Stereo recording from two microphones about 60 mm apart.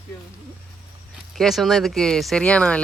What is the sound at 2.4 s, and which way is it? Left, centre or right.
Speech, centre.